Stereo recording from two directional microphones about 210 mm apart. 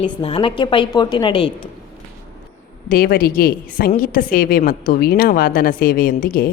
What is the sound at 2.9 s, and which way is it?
A woman's voice, 45° left (ahead or behind).